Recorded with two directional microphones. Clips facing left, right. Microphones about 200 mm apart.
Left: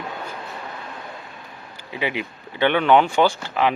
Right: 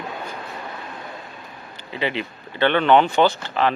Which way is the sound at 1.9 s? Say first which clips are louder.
Right 1 dB; 10° left (ahead or behind).